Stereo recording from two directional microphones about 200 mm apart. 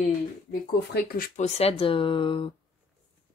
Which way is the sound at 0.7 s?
50° left (ahead or behind).